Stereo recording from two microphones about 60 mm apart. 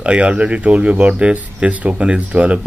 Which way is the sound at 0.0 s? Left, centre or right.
Centre.